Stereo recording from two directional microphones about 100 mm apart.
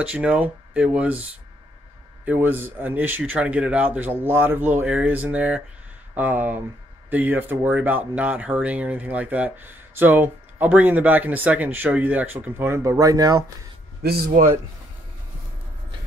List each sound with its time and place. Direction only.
0.0 s speech: 10° right (ahead or behind)
2.2 s speech: 20° right (ahead or behind); by 13.7 s 35° right (ahead or behind)